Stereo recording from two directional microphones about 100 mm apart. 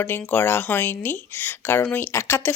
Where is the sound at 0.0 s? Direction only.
20° left (ahead or behind).